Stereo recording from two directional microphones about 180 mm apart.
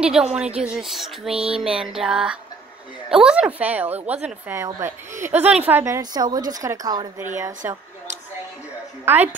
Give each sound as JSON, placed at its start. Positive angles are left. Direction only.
{"t": 0.0, "sound": "a sound", "side_deg": -5}
{"t": 3.1, "sound": "a woman's voice", "side_deg": -5}
{"t": 9.0, "sound": "a woman's voice", "side_deg": -10}